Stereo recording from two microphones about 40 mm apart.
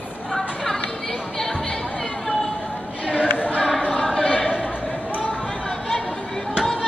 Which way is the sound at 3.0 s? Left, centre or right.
Left.